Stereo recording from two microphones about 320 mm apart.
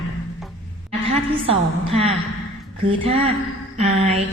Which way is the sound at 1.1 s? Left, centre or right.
Centre.